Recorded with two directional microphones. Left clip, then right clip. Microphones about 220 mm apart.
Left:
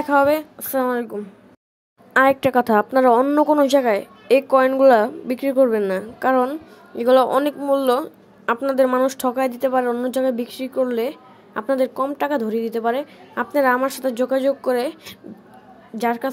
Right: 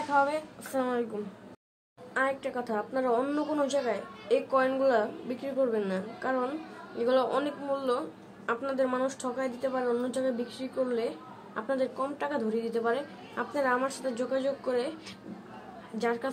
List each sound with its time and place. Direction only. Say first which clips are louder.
0.1 s speech: left 11 dB; 40° left (ahead or behind)
2.1 s speech: left 15 dB; 40° left (ahead or behind)